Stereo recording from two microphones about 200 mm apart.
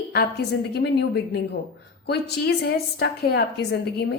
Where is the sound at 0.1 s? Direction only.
55° left (ahead or behind).